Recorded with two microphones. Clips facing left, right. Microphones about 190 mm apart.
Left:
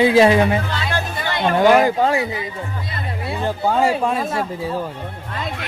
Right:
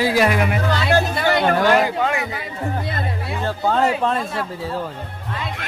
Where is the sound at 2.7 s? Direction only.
50° right (ahead or behind).